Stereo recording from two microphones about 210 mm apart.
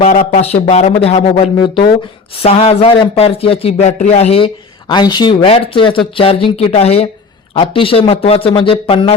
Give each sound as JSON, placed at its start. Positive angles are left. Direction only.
{"t": 0.0, "sound": "a man's voice", "side_deg": 35}